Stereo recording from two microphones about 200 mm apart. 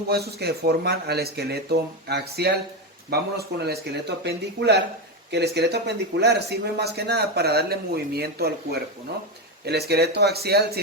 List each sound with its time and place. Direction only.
0.1 s speech: 55° right (ahead or behind)
9.6 s speech: 55° right (ahead or behind)